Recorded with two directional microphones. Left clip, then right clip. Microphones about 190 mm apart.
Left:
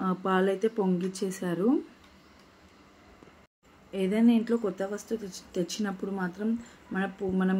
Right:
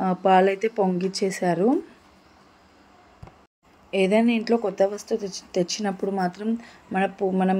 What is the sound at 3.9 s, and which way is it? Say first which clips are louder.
Speech: right 6 dB; 30° right (ahead or behind).